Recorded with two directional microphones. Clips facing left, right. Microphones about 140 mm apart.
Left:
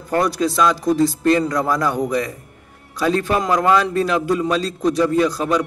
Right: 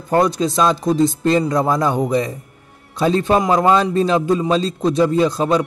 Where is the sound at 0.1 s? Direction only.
25° right (ahead or behind).